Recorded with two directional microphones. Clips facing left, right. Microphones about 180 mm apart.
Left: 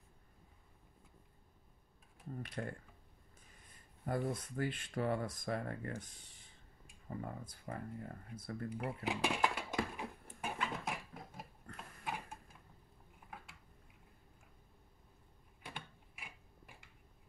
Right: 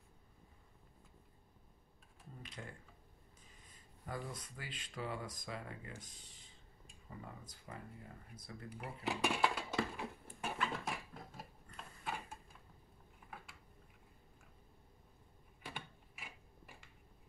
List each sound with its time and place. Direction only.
2.3 s speech: 60° left (ahead or behind)
4.0 s speech: 55° left (ahead or behind)
7.1 s speech: 45° left (ahead or behind)
9.0 s speech: 15° left (ahead or behind)
9.9 s a sound: 15° left (ahead or behind)
11.7 s dog: 15° left (ahead or behind)